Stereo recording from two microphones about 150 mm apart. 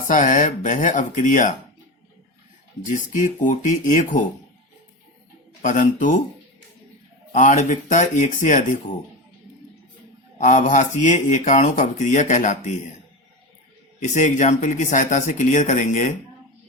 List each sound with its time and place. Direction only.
0.1 s speech: 60° left (ahead or behind)
2.8 s speech: 60° left (ahead or behind)
5.6 s speech: 60° left (ahead or behind)
7.3 s speech: 55° left (ahead or behind)
10.4 s speech: 60° left (ahead or behind)
14.0 s speech: 55° left (ahead or behind)